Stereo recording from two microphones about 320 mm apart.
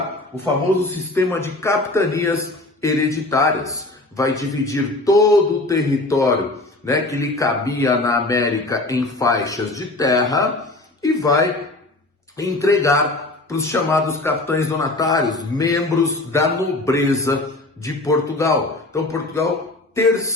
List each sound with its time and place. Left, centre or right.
0.7 s a man's voice: centre